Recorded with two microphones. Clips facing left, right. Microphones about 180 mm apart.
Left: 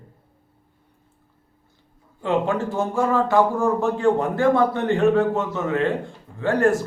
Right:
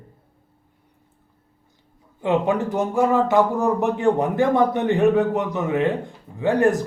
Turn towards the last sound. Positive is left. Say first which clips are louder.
# right 1 dB
turn(degrees=-15)  # may be behind; listen again after turning